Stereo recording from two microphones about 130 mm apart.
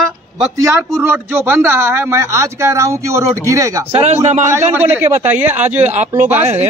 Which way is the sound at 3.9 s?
55° right (ahead or behind).